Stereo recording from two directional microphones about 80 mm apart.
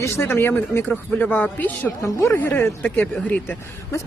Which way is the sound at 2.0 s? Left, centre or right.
Left.